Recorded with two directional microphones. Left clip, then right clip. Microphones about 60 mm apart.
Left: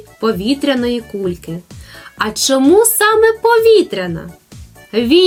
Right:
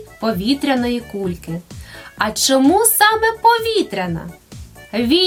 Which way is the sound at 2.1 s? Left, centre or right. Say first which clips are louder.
Left 1 dB; right.